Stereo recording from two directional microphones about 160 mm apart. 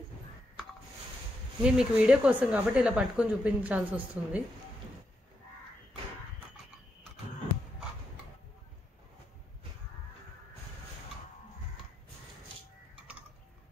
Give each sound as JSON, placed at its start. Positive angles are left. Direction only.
{"t": 1.6, "sound": "speech", "side_deg": -5}